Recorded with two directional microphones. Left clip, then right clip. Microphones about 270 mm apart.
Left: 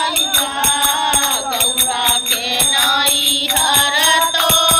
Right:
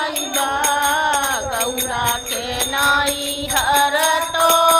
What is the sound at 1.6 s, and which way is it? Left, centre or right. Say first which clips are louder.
Music: left 4 dB; right.